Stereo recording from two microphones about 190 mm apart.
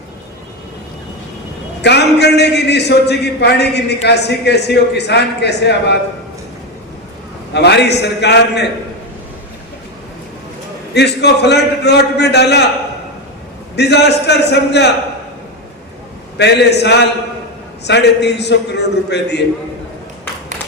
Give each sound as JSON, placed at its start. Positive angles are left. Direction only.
{"t": 1.8, "sound": "a man's voice", "side_deg": 60}
{"t": 7.5, "sound": "a man's voice", "side_deg": 60}
{"t": 10.9, "sound": "a man's voice", "side_deg": 60}
{"t": 13.7, "sound": "a man's voice", "side_deg": 60}
{"t": 16.4, "sound": "a man's voice", "side_deg": 60}